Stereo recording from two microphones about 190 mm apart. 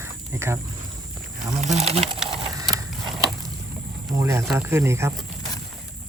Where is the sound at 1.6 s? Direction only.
35° right (ahead or behind).